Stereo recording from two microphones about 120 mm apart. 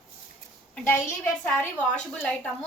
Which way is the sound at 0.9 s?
20° left (ahead or behind).